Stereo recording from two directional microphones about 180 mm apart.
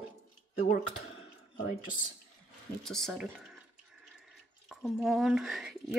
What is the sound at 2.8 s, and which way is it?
Speech, centre (ahead or behind).